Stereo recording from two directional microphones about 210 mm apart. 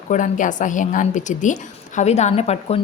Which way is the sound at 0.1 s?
35° left (ahead or behind).